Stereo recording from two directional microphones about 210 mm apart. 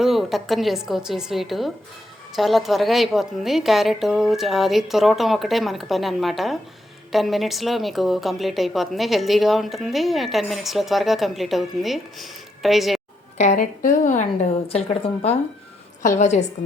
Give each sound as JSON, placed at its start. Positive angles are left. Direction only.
{"t": 0.0, "sound": "speech", "side_deg": 0}
{"t": 13.3, "sound": "a woman's voice", "side_deg": 35}